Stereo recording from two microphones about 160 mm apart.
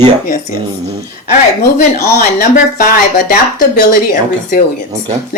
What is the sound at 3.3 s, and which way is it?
Speech, 70° left (ahead or behind).